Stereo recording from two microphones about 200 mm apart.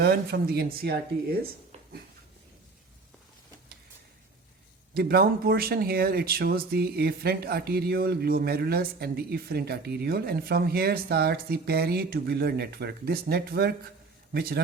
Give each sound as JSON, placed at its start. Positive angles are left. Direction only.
{"t": 0.0, "sound": "speech", "side_deg": -50}
{"t": 4.9, "sound": "a man's voice", "side_deg": -50}